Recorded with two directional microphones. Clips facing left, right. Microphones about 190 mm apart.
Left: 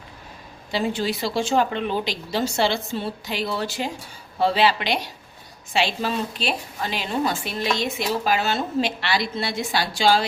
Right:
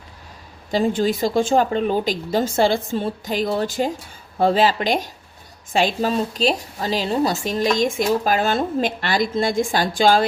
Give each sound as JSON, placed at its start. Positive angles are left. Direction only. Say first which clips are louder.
{"t": 0.7, "sound": "a woman's voice", "louder": "right 5 dB", "side_deg": -45}